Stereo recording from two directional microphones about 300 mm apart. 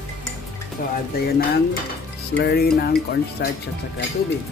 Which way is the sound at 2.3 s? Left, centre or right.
Left.